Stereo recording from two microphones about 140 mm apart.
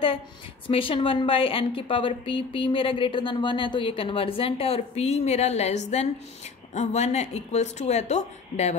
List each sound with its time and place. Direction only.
0.7 s speech: 40° left (ahead or behind)